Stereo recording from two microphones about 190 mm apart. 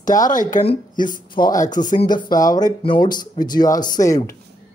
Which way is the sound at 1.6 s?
45° left (ahead or behind).